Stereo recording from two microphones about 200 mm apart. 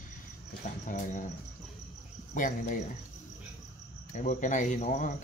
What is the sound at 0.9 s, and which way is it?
Speech, 40° left (ahead or behind).